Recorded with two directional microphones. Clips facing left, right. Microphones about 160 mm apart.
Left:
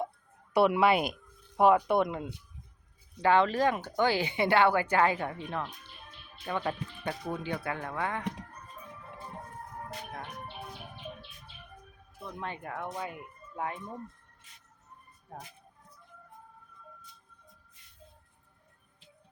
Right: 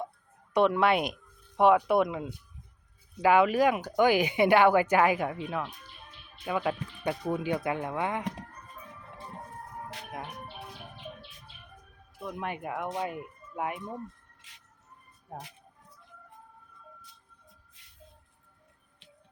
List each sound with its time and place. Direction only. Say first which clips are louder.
0.5 s speech: even; 5° left (ahead or behind); by 8.2 s 15° right (ahead or behind)
12.2 s speech: right 4 dB; 15° right (ahead or behind)
15.3 s speech: right 3 dB; 15° right (ahead or behind)